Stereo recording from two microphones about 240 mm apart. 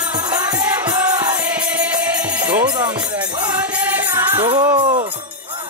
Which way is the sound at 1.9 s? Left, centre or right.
Centre.